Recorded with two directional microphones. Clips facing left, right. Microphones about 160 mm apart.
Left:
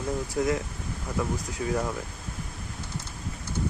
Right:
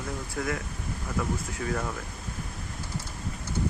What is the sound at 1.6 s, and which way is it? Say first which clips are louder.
Speech: left 4 dB; 20° left (ahead or behind).